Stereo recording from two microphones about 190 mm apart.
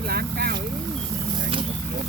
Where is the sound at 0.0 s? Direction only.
55° right (ahead or behind).